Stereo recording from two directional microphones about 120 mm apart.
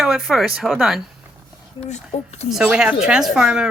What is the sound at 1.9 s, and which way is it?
Speech, 70° left (ahead or behind).